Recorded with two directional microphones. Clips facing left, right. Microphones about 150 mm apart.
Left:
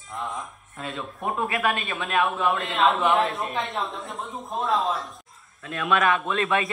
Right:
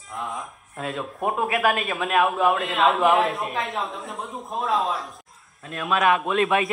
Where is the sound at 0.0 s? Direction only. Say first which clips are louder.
Right 1 dB; centre (ahead or behind).